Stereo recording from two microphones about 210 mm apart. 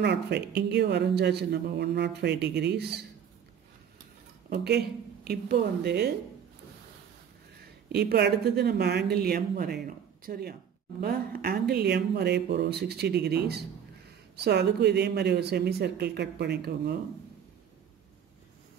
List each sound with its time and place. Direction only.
0.0 s speech: 55° right (ahead or behind)
4.5 s speech: 50° right (ahead or behind)
7.9 s speech: 50° right (ahead or behind)